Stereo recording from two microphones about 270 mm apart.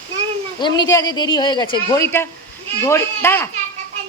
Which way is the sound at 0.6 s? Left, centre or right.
Centre.